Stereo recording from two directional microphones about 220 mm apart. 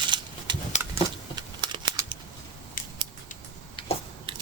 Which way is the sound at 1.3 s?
20° right (ahead or behind).